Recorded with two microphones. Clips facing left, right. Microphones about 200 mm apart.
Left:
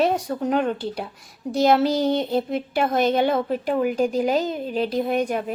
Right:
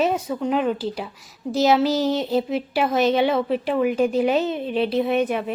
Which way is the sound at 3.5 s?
40° left (ahead or behind).